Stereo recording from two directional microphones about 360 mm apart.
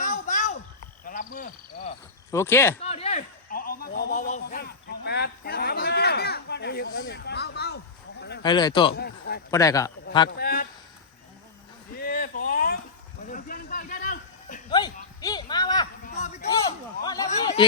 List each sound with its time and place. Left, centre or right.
0.0 s a sound: left
1.0 s frog: left
2.3 s a man's voice: centre
2.8 s a sound: centre
8.4 s a man's voice: centre
9.0 s a man's voice: left
9.5 s a man's voice: centre
10.2 s a man's voice: left
11.9 s a sound: left
17.0 s a man's voice: centre